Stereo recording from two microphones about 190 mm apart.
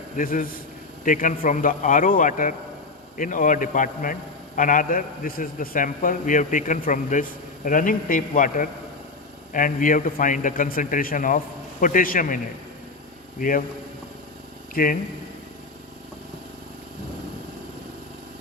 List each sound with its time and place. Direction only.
0.2 s a man's voice: 45° left (ahead or behind)
14.8 s a man's voice: 50° left (ahead or behind)